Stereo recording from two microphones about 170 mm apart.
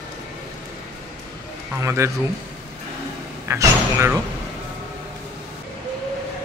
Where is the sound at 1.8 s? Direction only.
15° right (ahead or behind).